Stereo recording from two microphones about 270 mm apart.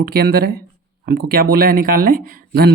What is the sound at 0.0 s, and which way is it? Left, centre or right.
Speech, right.